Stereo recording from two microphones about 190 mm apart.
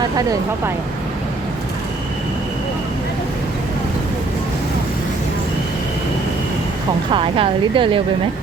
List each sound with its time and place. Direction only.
0.0 s a woman's voice: 20° right (ahead or behind)
7.1 s a woman's voice: 30° right (ahead or behind)